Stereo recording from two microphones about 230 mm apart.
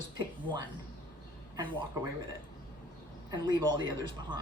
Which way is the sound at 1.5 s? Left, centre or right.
Centre.